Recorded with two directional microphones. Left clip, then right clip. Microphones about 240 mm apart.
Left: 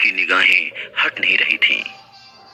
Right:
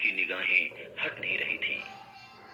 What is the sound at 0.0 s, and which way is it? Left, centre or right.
A man's voice, left.